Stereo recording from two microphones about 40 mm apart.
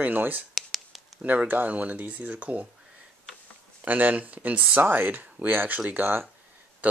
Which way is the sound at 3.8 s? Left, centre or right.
Right.